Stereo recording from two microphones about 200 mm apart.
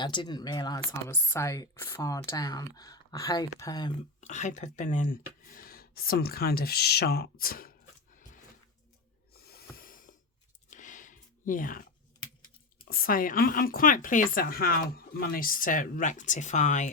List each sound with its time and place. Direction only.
0.0 s speech: 25° left (ahead or behind)
4.2 s a woman's voice: 35° left (ahead or behind)
9.3 s snort: 50° left (ahead or behind)
10.7 s a sound: 40° left (ahead or behind)
12.9 s a woman's voice: 45° left (ahead or behind)